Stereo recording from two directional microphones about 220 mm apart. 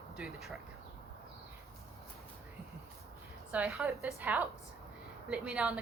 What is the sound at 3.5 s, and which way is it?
A woman's voice, 5° right (ahead or behind).